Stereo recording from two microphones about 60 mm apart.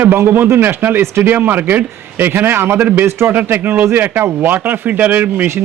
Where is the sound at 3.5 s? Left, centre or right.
Right.